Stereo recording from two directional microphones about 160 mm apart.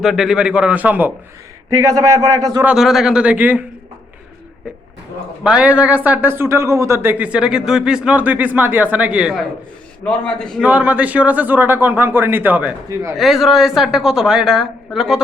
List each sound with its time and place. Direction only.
0.0 s speech: centre (ahead or behind)
1.8 s speech: 20° right (ahead or behind)
2.6 s a woman's voice: centre (ahead or behind)
5.4 s speech: 5° right (ahead or behind)
10.0 s a woman's voice: 5° left (ahead or behind)
10.6 s speech: 10° right (ahead or behind)
13.1 s a woman's voice: centre (ahead or behind)